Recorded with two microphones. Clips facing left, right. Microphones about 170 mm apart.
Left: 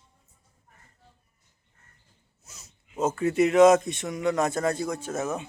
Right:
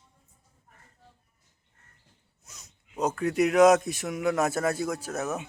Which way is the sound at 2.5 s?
Centre (ahead or behind).